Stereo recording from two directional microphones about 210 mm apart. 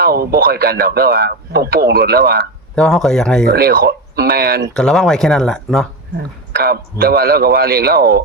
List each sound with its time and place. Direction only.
0.0 s speech: 45° right (ahead or behind)
2.7 s speech: centre (ahead or behind)
3.4 s speech: 45° right (ahead or behind)
4.7 s speech: 5° left (ahead or behind)
6.5 s a sound: 50° right (ahead or behind)
7.0 s speech: 45° right (ahead or behind)